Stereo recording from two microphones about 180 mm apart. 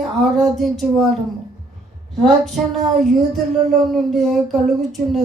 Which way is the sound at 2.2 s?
Centre (ahead or behind).